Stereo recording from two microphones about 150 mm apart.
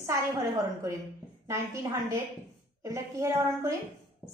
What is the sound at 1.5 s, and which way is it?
A woman's voice, 20° right (ahead or behind).